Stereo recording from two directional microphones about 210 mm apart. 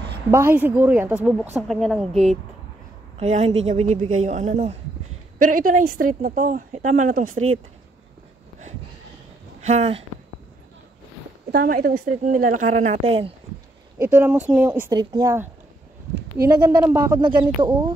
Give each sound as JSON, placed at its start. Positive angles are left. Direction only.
{"t": 0.3, "sound": "a woman's voice", "side_deg": -10}
{"t": 3.2, "sound": "a woman's voice", "side_deg": -30}
{"t": 9.6, "sound": "speech", "side_deg": -30}
{"t": 11.5, "sound": "a woman's voice", "side_deg": -45}
{"t": 13.9, "sound": "a woman's voice", "side_deg": -10}
{"t": 16.6, "sound": "a woman's voice", "side_deg": -10}
{"t": 17.1, "sound": "speech", "side_deg": -20}